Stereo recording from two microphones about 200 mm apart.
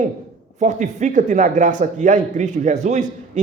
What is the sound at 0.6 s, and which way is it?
A man's voice, 35° right (ahead or behind).